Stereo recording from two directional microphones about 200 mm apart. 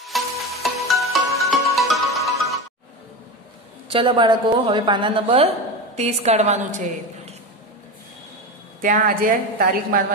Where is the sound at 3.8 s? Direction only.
25° right (ahead or behind).